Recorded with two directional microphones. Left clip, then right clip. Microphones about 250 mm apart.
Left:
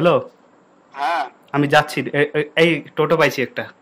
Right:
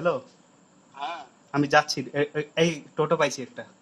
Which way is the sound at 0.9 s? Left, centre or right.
Left.